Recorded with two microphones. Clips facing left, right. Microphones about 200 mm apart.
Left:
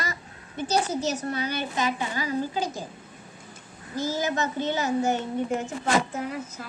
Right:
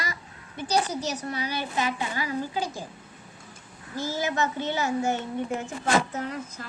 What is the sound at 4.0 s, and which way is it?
Speech, 40° left (ahead or behind).